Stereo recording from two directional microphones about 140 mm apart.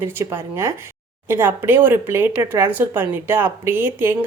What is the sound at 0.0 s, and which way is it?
Speech, 15° right (ahead or behind).